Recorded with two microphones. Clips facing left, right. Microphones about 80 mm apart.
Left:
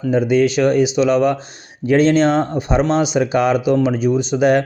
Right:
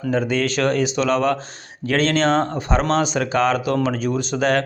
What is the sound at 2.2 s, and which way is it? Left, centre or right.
Speech, right.